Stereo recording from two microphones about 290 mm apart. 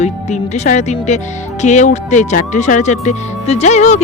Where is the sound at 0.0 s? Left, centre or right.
Left.